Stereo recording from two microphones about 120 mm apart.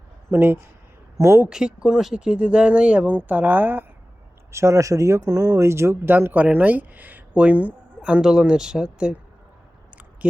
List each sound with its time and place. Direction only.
0.3 s speech: 20° right (ahead or behind)
1.5 s speech: 5° right (ahead or behind)